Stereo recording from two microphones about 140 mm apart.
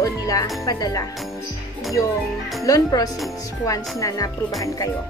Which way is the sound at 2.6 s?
25° left (ahead or behind).